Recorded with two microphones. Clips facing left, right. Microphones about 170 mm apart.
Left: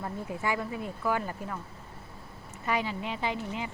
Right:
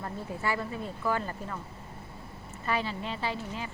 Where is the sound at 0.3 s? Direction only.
15° left (ahead or behind).